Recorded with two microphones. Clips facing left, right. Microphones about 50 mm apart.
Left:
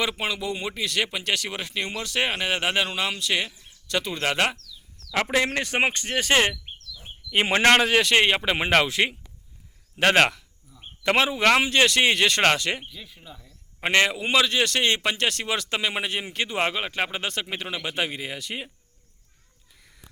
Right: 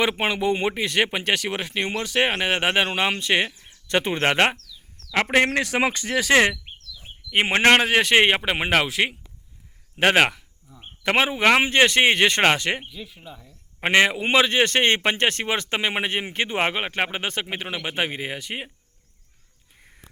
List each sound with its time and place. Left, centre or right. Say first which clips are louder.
0.0 s a man's voice: right 5 dB; right
5.1 s a man's voice: right 4 dB; right
5.5 s speech: right 2 dB; right
7.3 s a man's voice: right 1 dB; right
8.4 s a man's voice: even; centre; by 12.9 s right
12.9 s a man's voice: right 4 dB; centre; by 18.7 s right
19.7 s a sound: right 2 dB; right